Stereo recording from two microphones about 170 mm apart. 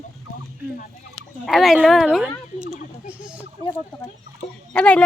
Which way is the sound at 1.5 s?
Centre (ahead or behind).